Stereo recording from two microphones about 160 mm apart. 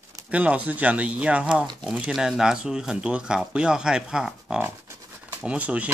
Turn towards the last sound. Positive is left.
turn(degrees=-10)  # may be behind; listen again after turning